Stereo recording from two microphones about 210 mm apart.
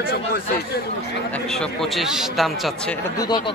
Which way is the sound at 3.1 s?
20° left (ahead or behind).